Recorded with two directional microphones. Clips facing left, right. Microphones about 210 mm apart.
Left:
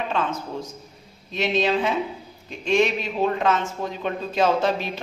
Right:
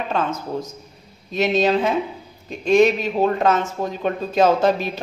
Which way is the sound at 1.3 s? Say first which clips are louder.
Right 4 dB; 40° right (ahead or behind).